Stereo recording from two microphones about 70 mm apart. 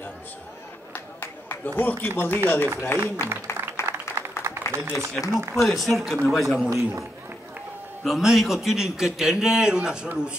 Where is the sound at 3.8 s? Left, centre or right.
Right.